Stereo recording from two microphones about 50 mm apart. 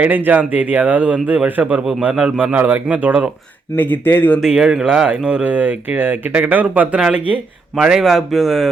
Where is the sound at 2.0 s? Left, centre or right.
Centre.